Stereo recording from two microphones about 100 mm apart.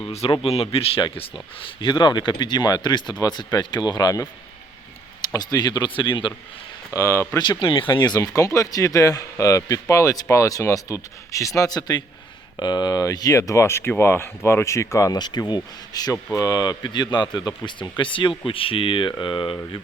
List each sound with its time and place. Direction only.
0.0 s speech: 90° left; by 1.0 s 75° left (ahead or behind)
1.8 s speech: 50° left (ahead or behind)
6.9 s speech: 30° left (ahead or behind)
7.3 s speech: 40° left (ahead or behind)
7.6 s speech: 55° left (ahead or behind)